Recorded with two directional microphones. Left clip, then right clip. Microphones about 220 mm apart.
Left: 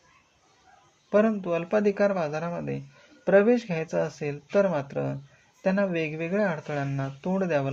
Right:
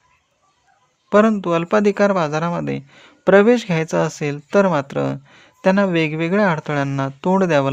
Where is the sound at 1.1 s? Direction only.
45° right (ahead or behind).